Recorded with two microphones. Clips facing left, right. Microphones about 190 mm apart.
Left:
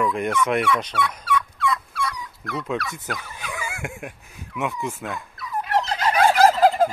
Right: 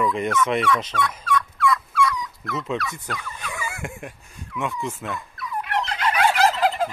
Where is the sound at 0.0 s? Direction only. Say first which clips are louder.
Even; 10° left (ahead or behind).